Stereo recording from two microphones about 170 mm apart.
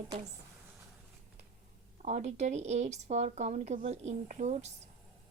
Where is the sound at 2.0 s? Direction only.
45° right (ahead or behind).